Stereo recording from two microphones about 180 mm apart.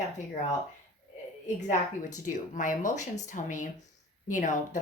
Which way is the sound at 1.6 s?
45° left (ahead or behind).